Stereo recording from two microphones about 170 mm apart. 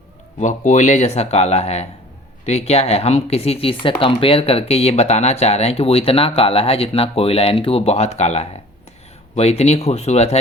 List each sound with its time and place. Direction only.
0.3 s speech: 45° left (ahead or behind)